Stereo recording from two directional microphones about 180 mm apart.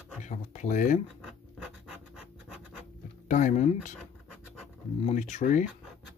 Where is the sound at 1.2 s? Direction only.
Centre (ahead or behind).